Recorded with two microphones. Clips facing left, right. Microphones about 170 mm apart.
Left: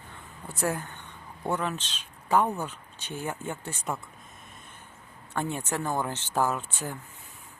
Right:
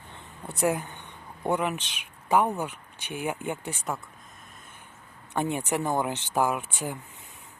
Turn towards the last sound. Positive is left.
turn(degrees=-10)  # may be behind; listen again after turning